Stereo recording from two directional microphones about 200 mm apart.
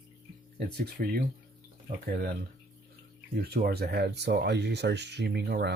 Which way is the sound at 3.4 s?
50° right (ahead or behind).